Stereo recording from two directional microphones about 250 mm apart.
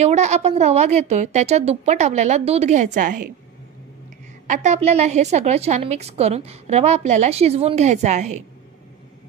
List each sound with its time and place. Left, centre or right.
0.0 s a woman's voice: right
4.5 s a woman's voice: right